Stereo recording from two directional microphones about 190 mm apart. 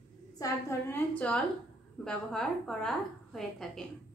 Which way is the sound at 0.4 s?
15° left (ahead or behind).